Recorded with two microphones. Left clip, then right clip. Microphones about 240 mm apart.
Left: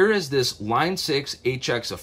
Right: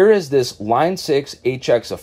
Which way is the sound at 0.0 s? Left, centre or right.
Centre.